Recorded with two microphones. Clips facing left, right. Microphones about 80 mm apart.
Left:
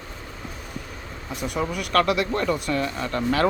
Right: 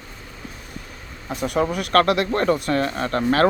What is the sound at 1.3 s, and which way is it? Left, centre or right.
Speech, right.